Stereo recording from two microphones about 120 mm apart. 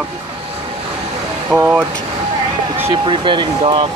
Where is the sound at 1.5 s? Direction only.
5° left (ahead or behind).